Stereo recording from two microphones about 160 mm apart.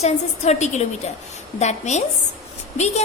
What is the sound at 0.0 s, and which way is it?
A woman's voice, 45° left (ahead or behind).